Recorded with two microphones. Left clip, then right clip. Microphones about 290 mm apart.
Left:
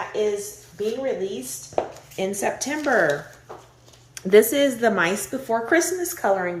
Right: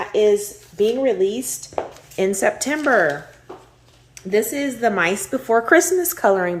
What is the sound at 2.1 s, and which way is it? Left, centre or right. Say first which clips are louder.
Speech: right 6 dB; centre.